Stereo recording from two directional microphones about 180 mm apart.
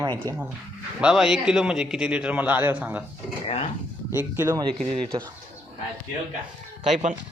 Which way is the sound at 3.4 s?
35° left (ahead or behind).